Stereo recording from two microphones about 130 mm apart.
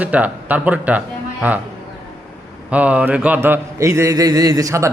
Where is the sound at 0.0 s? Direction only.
10° right (ahead or behind).